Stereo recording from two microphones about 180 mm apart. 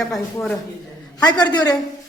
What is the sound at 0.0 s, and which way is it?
Speech, 5° left (ahead or behind).